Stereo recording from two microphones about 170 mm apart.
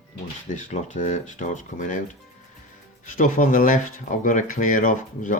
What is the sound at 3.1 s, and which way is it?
Speech, 50° left (ahead or behind).